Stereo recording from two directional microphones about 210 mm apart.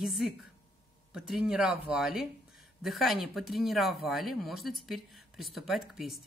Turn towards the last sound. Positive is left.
turn(degrees=0)  # may be behind; listen again after turning